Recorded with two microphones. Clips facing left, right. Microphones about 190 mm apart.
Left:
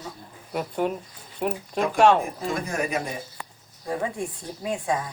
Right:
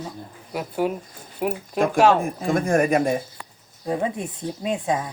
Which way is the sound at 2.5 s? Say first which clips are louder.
Right 10 dB; 50° right (ahead or behind).